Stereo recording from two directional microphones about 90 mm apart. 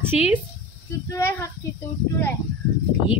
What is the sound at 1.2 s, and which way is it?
Speech, 30° left (ahead or behind).